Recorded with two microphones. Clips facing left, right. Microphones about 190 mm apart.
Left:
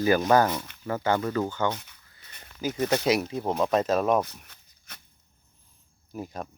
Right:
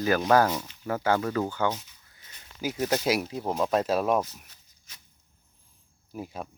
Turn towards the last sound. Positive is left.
turn(degrees=-5)  # may be behind; listen again after turning